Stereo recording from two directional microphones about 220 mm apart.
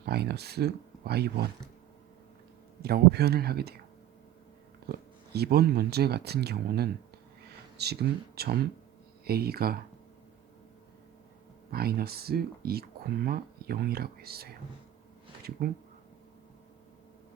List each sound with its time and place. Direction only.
0.0 s speech: 45° right (ahead or behind)
2.8 s speech: 45° right (ahead or behind)
4.9 s speech: 45° right (ahead or behind)
11.7 s speech: 45° right (ahead or behind)
15.6 s speech: 45° right (ahead or behind)